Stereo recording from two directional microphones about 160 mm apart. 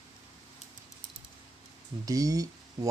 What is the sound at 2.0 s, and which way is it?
Speech, 20° right (ahead or behind).